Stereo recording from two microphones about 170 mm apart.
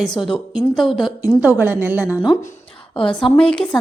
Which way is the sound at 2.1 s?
25° left (ahead or behind).